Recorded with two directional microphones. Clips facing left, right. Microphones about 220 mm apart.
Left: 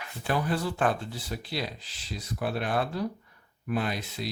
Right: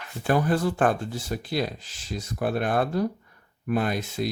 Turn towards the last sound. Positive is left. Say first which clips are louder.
# right 5 dB
turn(degrees=-50)  # may be behind; listen again after turning